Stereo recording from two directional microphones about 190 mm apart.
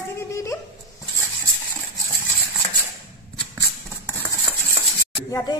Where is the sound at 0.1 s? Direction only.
15° left (ahead or behind).